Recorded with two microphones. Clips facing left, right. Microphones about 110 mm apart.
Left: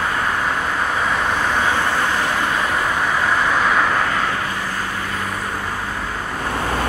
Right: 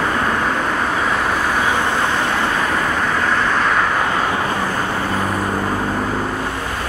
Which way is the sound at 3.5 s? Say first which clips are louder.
Even; centre (ahead or behind).